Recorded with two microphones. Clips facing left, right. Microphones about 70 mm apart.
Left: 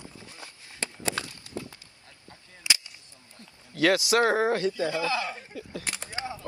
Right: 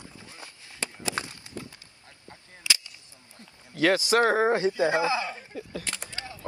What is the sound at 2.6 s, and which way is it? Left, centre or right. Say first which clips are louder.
Cap gun: even; left.